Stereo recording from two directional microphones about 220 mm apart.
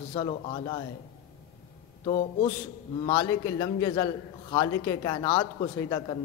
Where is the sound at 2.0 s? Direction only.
25° left (ahead or behind).